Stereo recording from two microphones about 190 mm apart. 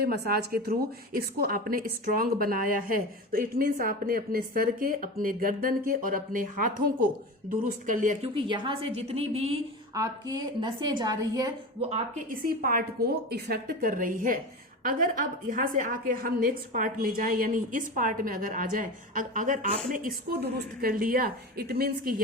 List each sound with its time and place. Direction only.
0.0 s a woman's voice: 55° right (ahead or behind)
8.4 s a woman's voice: 25° right (ahead or behind)
9.9 s a woman's voice: 20° right (ahead or behind)
11.9 s a woman's voice: 40° right (ahead or behind)
20.1 s a woman's voice: 60° right (ahead or behind)